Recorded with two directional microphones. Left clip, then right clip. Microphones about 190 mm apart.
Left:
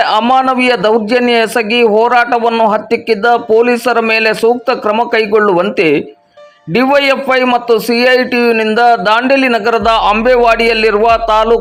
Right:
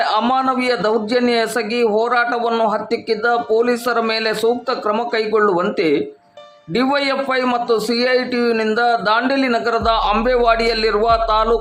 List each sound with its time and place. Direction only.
0.0 s a man's voice: 20° left (ahead or behind)